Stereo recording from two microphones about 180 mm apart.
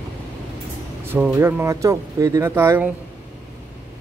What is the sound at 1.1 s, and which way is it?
Speech, 10° right (ahead or behind).